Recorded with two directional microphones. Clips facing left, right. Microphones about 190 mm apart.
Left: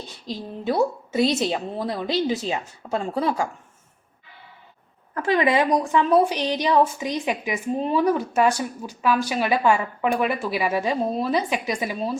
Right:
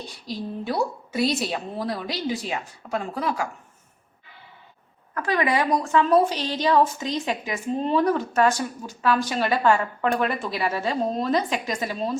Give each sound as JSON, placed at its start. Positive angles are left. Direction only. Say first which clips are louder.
{"t": 0.3, "sound": "a woman's voice", "louder": "left 2 dB", "side_deg": 20}
{"t": 5.1, "sound": "a woman's voice", "louder": "left 3 dB", "side_deg": 25}